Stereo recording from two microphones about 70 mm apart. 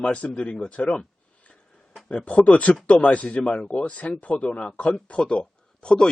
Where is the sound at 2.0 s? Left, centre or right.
Centre.